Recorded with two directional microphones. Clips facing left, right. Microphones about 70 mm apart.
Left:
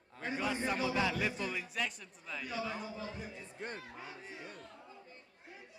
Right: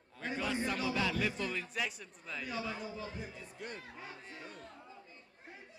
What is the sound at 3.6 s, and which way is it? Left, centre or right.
Speech, left.